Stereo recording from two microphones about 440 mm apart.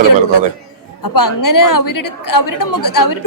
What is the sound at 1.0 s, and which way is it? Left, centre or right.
A woman's voice, left.